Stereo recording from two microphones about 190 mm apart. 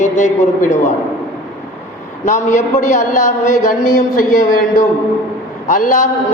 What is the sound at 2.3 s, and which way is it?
A man's voice, 40° left (ahead or behind).